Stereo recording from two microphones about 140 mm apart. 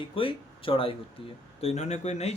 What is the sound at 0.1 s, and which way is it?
Speech, 40° left (ahead or behind).